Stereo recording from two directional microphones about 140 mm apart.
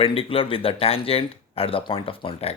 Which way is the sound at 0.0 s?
40° left (ahead or behind).